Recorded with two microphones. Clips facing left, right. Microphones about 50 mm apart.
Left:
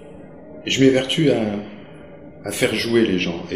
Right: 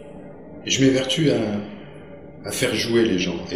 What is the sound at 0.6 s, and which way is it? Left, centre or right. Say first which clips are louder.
Speech: left 3 dB; centre.